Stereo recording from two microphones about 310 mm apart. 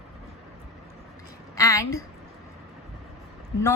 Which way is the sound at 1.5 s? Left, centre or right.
Centre.